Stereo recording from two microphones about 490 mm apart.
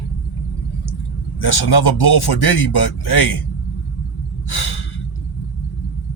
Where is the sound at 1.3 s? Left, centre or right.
Left.